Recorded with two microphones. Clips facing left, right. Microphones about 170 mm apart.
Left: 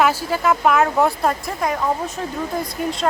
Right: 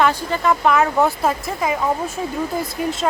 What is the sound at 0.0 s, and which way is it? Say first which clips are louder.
Speech: even; 5° left (ahead or behind).